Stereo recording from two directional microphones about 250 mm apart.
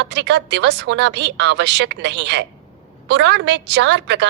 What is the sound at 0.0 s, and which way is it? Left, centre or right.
A woman's voice, right.